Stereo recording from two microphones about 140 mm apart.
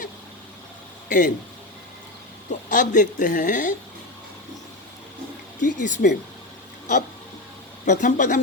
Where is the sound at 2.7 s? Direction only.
65° left (ahead or behind).